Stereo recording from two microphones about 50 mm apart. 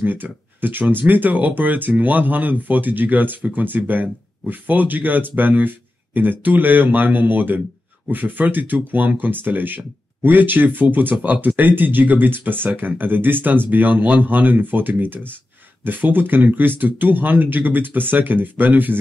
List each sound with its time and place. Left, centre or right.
0.0 s speech: right